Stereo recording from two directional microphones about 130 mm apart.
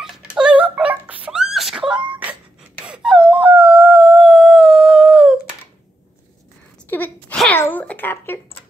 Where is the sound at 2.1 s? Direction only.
10° right (ahead or behind).